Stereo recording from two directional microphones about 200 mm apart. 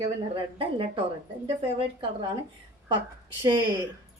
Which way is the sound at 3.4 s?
25° right (ahead or behind).